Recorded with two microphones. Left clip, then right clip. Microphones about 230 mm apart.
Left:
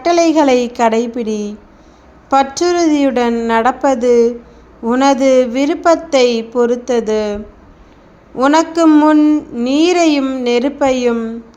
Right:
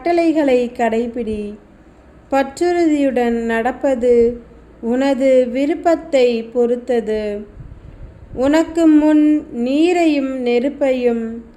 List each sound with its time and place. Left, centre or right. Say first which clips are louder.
0.0 s a woman's voice: left 4 dB; centre
8.4 s a woman's voice: left 4 dB; centre